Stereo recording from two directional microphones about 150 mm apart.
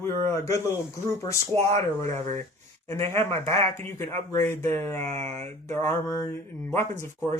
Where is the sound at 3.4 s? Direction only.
40° right (ahead or behind).